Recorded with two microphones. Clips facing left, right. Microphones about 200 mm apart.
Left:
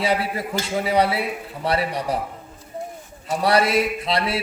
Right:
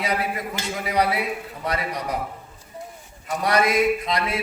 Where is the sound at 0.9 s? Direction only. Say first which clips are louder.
Left 2 dB; 30° left (ahead or behind).